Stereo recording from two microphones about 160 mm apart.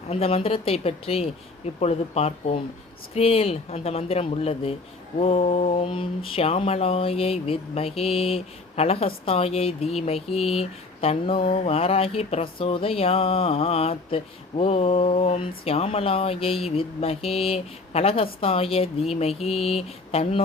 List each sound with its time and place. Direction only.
0.1 s mantra: 40° left (ahead or behind)